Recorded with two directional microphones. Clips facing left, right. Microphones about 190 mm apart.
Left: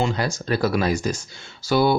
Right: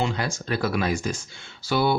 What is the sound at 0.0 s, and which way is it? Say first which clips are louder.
Speech: left 3 dB; 40° left (ahead or behind).